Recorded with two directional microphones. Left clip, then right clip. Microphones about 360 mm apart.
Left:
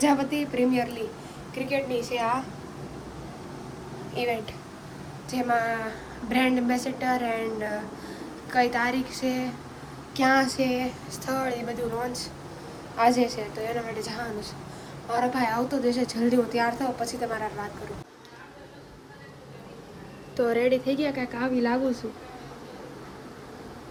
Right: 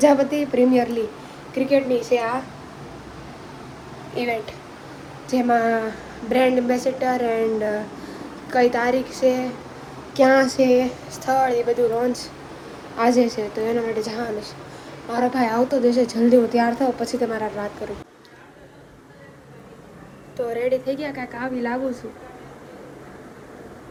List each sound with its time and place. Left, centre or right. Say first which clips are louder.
0.0 s a woman's voice: right 8 dB; centre
4.1 s a woman's voice: right 4 dB; centre
13.0 s a woman's voice: right 4 dB; centre
20.3 s a woman's voice: right 1 dB; left